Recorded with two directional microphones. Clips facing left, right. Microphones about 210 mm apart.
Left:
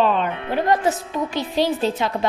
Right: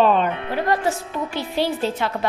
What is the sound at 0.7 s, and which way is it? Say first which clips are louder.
A woman's voice: left 2 dB; 20° left (ahead or behind).